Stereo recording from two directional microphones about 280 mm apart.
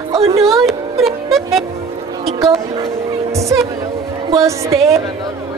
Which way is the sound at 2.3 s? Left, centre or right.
Centre.